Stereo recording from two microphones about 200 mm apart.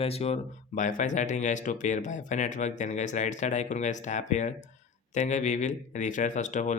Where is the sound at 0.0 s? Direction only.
30° left (ahead or behind).